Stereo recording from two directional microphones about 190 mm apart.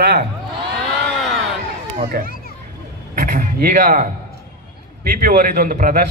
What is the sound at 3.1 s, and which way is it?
Speech, 45° right (ahead or behind).